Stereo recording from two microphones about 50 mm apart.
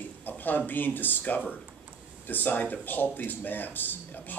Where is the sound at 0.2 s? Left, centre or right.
Left.